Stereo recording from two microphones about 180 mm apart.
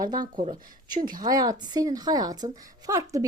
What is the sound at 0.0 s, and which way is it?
Speech, 20° right (ahead or behind).